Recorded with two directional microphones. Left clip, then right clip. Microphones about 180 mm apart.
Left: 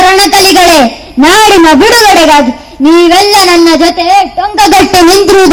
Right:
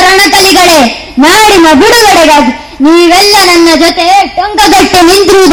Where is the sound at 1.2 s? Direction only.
15° right (ahead or behind).